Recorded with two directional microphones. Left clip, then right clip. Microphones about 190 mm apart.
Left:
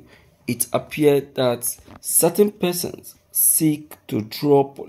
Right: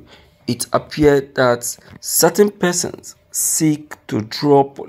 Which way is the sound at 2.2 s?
5° right (ahead or behind).